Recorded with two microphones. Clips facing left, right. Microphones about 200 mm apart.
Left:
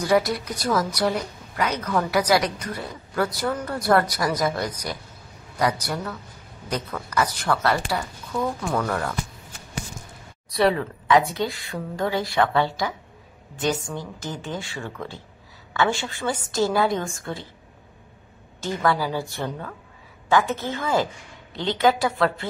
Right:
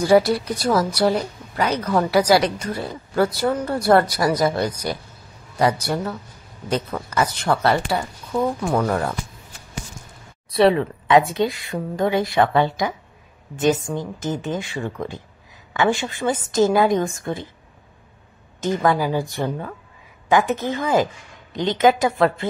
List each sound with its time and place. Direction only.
0.0 s a woman's voice: 30° right (ahead or behind)
10.5 s a woman's voice: 25° right (ahead or behind)
18.6 s a woman's voice: 20° right (ahead or behind)